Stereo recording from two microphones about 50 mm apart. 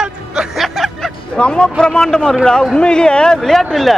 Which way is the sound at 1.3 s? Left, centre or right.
Left.